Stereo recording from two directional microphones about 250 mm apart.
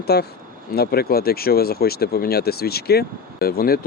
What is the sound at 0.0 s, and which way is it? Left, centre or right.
Speech, left.